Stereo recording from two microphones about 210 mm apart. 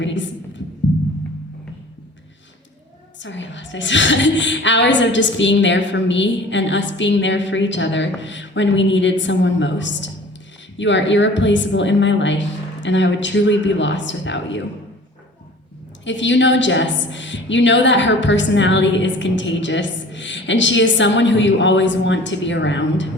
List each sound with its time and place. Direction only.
0.0 s a sound: 60° left (ahead or behind)
3.2 s a woman's voice: 60° left (ahead or behind)
16.0 s a woman's voice: 60° left (ahead or behind)